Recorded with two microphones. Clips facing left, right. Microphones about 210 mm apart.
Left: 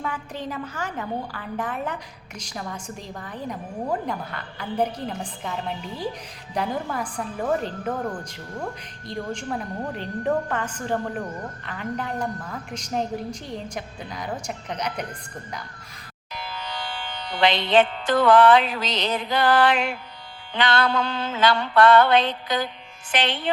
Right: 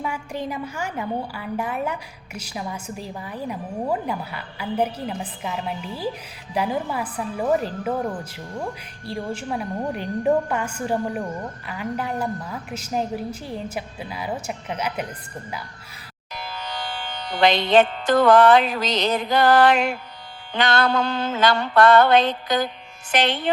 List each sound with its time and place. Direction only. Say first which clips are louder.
0.0 s a woman's voice: right 3 dB; 10° right (ahead or behind)
16.3 s music: right 1 dB; 45° right (ahead or behind)
20.5 s mantra: right 2 dB; 45° right (ahead or behind)